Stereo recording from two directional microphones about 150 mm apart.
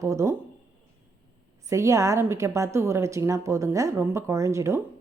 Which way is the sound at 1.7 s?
20° right (ahead or behind).